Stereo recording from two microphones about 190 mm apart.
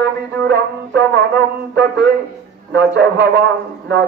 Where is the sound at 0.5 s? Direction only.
60° right (ahead or behind).